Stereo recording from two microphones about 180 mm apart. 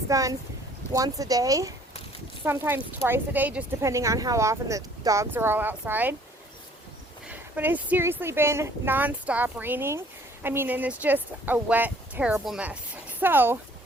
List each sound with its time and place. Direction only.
0.1 s speech: 20° right (ahead or behind)
7.3 s speech: 10° right (ahead or behind)